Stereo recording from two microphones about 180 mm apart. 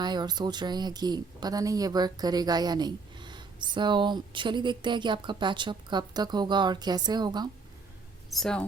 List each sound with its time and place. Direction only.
0.0 s a woman's voice: 25° right (ahead or behind)
8.3 s speech: centre (ahead or behind)